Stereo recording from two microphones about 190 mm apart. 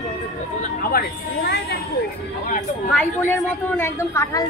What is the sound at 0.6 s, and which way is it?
Speech, 55° left (ahead or behind).